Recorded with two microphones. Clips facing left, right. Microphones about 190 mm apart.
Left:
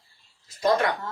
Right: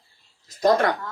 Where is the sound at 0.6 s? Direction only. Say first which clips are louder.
Right 3 dB; 45° right (ahead or behind).